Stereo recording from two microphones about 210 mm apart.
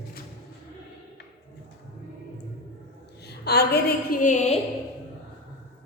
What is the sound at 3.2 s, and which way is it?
A woman's voice, 50° left (ahead or behind).